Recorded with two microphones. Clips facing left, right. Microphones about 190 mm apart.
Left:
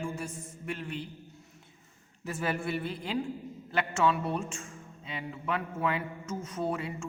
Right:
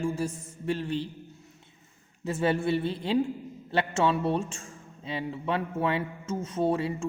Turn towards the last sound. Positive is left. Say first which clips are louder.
# right 6 dB
turn(degrees=-30)  # may be behind; listen again after turning